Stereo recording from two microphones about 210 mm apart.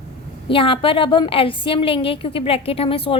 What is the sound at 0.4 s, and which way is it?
A woman's voice, 25° left (ahead or behind).